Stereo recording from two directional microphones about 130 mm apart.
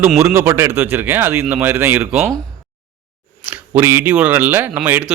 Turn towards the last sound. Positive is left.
turn(degrees=-10)  # may be behind; listen again after turning